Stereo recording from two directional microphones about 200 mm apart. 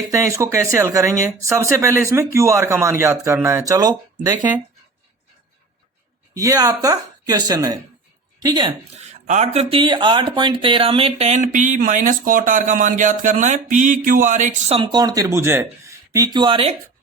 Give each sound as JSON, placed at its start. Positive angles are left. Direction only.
{"t": 0.1, "sound": "speech", "side_deg": -15}
{"t": 6.3, "sound": "a woman's voice", "side_deg": -15}
{"t": 9.0, "sound": "speech", "side_deg": -35}
{"t": 14.8, "sound": "speech", "side_deg": -20}